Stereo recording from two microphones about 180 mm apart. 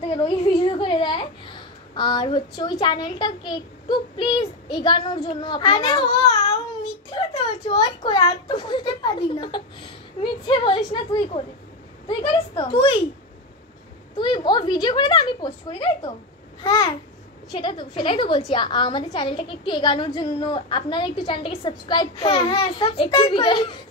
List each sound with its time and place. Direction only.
0.0 s a child's voice: 30° left (ahead or behind)
14.1 s a woman's voice: 25° left (ahead or behind)